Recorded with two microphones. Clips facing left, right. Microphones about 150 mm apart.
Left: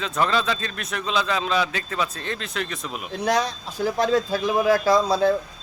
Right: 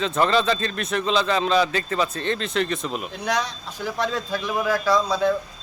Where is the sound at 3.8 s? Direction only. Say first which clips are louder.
Left 5 dB; 40° left (ahead or behind).